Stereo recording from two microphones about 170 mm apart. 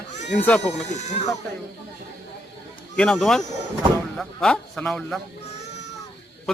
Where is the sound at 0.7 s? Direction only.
45° left (ahead or behind).